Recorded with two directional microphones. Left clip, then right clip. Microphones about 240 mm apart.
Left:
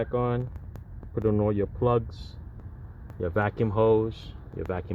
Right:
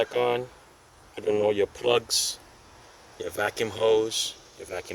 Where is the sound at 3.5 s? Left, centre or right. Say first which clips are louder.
Even; centre.